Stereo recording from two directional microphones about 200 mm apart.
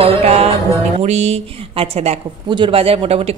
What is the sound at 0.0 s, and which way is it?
Music, 30° right (ahead or behind).